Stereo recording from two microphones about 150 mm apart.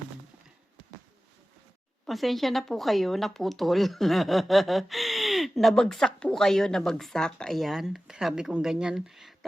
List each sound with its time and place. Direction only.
2.0 s speech: centre (ahead or behind)